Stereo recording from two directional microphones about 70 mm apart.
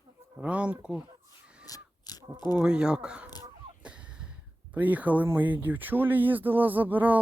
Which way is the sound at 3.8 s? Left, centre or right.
Centre.